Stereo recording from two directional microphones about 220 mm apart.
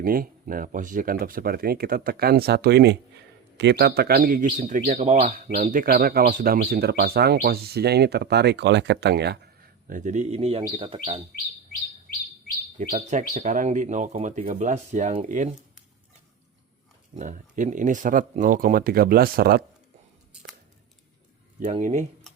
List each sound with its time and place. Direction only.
0.0 s speech: 40° right (ahead or behind)
9.8 s speech: 35° right (ahead or behind)
12.9 s speech: 35° right (ahead or behind)
17.2 s speech: 35° right (ahead or behind)
21.7 s speech: 35° right (ahead or behind)